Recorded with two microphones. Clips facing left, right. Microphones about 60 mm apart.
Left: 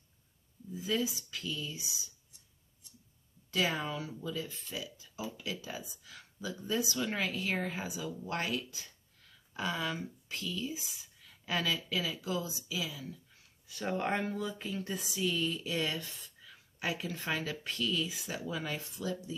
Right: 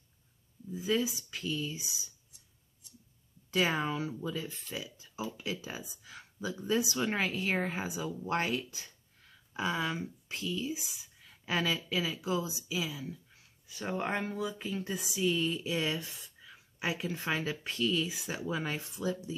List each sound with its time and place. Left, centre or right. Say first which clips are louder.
0.7 s speech: right 2 dB; right
3.5 s speech: right 3 dB; right
9.5 s speech: right 2 dB; centre
13.7 s speech: left 1 dB; centre; by 19.3 s right